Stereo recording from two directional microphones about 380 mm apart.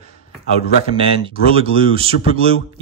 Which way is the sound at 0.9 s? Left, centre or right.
Centre.